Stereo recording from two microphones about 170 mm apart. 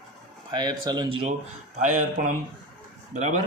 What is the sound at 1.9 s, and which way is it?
Speech, 50° right (ahead or behind).